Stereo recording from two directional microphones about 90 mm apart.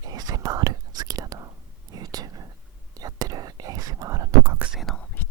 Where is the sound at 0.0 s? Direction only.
45° right (ahead or behind).